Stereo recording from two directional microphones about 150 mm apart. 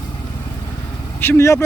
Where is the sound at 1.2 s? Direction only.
15° left (ahead or behind).